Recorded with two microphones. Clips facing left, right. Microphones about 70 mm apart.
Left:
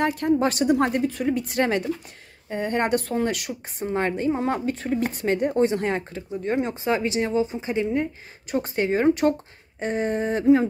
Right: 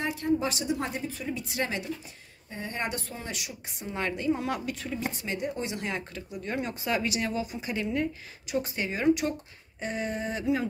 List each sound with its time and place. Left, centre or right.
0.0 s a woman's voice: left
3.8 s speech: left
8.5 s speech: left